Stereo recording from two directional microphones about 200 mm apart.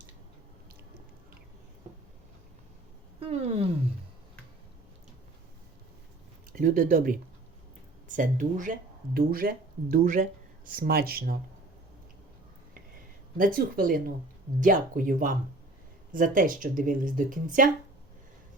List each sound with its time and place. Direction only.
3.2 s speech: 30° right (ahead or behind)
6.5 s speech: 45° right (ahead or behind)
13.3 s speech: 45° right (ahead or behind)